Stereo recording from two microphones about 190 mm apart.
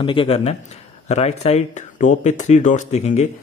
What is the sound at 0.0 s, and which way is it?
A man's voice, 25° left (ahead or behind).